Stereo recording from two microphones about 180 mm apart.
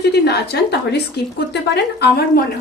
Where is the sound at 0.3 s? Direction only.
65° left (ahead or behind).